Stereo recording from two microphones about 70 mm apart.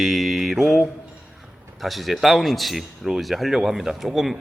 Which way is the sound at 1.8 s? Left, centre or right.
Centre.